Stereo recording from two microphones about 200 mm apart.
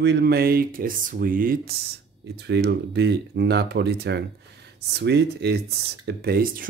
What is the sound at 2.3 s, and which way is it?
Speech, 55° right (ahead or behind).